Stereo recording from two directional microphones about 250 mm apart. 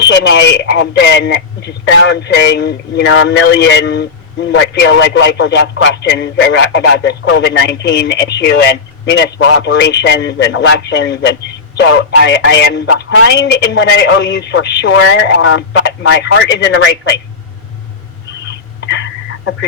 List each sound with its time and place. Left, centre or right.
0.0 s speech: left